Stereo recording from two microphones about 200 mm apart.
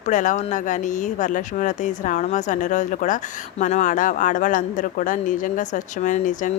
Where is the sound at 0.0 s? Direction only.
40° left (ahead or behind).